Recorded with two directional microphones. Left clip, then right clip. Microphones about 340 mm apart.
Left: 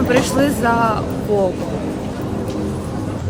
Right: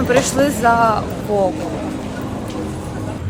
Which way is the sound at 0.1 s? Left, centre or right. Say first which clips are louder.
Right 2 dB; centre.